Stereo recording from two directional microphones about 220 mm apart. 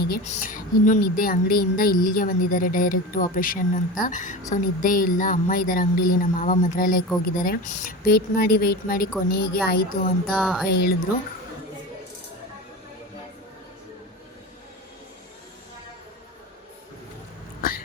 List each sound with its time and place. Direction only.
0.3 s a woman's voice: 35° left (ahead or behind)
10.3 s speech: 5° right (ahead or behind)
10.7 s a woman's voice: 45° left (ahead or behind)
17.6 s cat: 40° left (ahead or behind)